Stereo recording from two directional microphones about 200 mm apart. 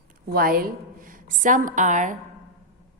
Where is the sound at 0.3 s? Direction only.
45° right (ahead or behind).